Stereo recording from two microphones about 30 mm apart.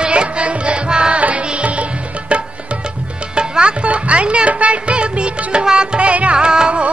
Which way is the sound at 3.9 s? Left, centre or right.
Right.